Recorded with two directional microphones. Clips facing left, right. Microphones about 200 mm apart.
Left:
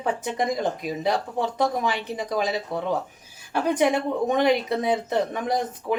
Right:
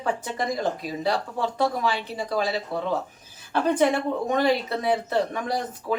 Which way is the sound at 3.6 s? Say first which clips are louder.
Even; 15° left (ahead or behind).